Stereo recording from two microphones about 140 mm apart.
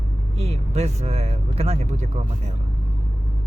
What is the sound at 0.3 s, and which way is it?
Speech, 50° right (ahead or behind).